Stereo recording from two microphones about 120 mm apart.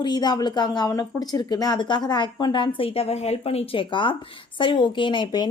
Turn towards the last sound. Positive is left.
turn(degrees=40)  # may be behind; listen again after turning